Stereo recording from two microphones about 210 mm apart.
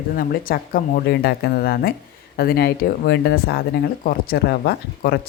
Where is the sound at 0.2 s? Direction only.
45° left (ahead or behind).